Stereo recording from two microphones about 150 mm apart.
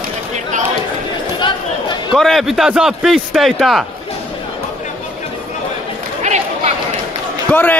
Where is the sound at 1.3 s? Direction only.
30° left (ahead or behind).